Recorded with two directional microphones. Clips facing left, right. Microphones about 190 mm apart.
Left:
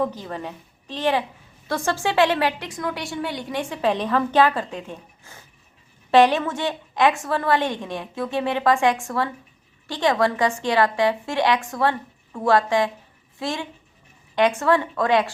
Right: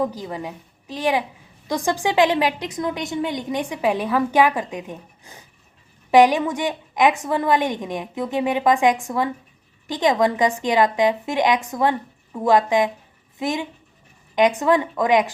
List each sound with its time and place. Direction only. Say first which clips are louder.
0.0 s a woman's voice: right 1 dB; 10° right (ahead or behind)